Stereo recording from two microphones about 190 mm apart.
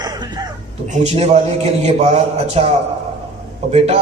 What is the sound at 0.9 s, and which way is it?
A man's voice, 35° right (ahead or behind).